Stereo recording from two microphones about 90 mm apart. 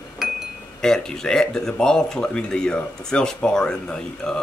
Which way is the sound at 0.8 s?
5° left (ahead or behind).